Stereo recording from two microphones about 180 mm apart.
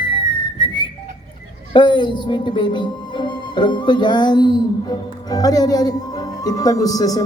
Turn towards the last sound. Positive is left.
turn(degrees=20)  # may be behind; listen again after turning